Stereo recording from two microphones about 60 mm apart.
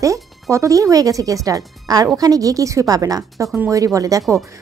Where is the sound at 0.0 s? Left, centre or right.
Right.